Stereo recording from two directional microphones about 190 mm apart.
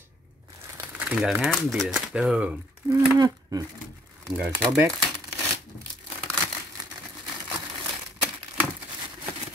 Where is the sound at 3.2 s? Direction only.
20° right (ahead or behind).